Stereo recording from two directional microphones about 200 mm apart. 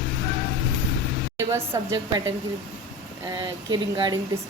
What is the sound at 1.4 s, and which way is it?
Speech, 15° right (ahead or behind).